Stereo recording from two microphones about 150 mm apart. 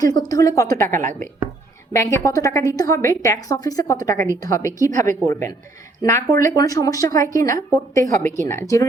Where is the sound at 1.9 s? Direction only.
20° left (ahead or behind).